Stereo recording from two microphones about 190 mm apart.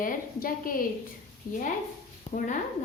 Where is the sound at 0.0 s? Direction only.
50° left (ahead or behind).